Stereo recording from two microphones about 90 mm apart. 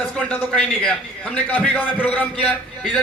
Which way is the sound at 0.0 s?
15° left (ahead or behind).